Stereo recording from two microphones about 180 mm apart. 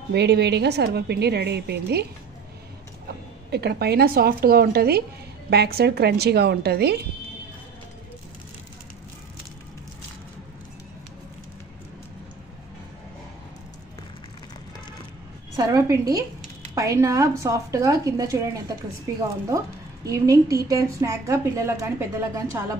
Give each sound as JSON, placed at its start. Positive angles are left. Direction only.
{"t": 0.1, "sound": "a woman's voice", "side_deg": -70}
{"t": 3.4, "sound": "a woman's voice", "side_deg": -65}
{"t": 15.5, "sound": "a woman's voice", "side_deg": -20}
{"t": 20.1, "sound": "a woman's voice", "side_deg": -20}